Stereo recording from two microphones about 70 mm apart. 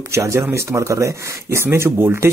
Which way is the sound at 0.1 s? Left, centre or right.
Right.